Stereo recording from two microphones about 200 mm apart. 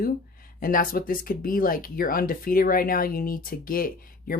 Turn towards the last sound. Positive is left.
turn(degrees=45)  # may be behind; listen again after turning